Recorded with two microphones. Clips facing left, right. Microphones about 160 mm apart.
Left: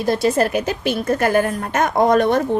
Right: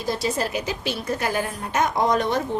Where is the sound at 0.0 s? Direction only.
60° left (ahead or behind).